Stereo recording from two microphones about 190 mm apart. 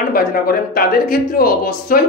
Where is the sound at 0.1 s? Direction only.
50° left (ahead or behind).